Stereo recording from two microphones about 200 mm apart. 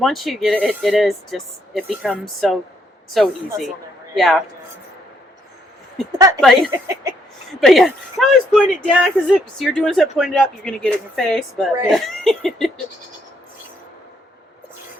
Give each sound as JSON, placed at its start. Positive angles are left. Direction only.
{"t": 0.0, "sound": "speech", "side_deg": 0}
{"t": 6.1, "sound": "speech", "side_deg": -15}
{"t": 6.4, "sound": "speech", "side_deg": 0}
{"t": 6.7, "sound": "speech", "side_deg": -20}
{"t": 7.6, "sound": "speech", "side_deg": 0}